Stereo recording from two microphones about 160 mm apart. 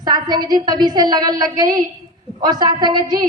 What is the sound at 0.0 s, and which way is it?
A woman's voice, 25° right (ahead or behind).